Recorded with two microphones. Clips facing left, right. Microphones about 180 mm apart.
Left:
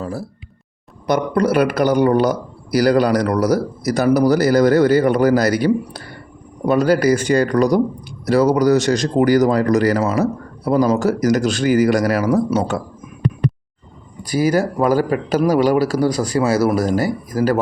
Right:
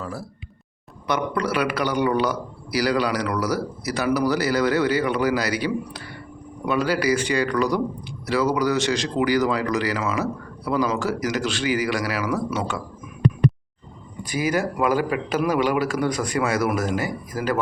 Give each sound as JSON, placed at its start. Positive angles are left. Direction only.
{"t": 0.0, "sound": "speech", "side_deg": 30}
{"t": 1.0, "sound": "a man's voice", "side_deg": 45}
{"t": 14.3, "sound": "a man's voice", "side_deg": 35}